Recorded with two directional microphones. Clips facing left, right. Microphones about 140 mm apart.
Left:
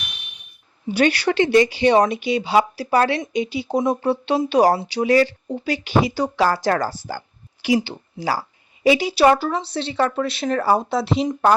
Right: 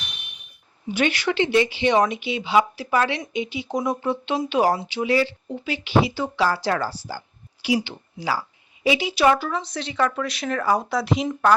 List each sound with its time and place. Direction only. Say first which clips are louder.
0.9 s a woman's voice: left 4 dB; 35° left (ahead or behind)